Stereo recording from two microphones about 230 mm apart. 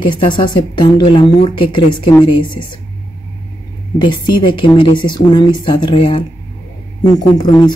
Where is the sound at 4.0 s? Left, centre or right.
Centre.